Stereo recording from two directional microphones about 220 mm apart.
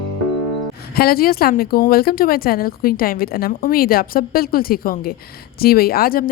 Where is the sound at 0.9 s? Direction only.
45° left (ahead or behind).